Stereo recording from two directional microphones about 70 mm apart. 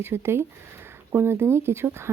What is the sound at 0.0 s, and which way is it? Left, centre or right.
Speech, right.